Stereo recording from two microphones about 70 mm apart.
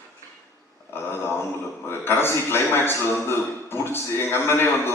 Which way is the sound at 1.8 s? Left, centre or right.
Left.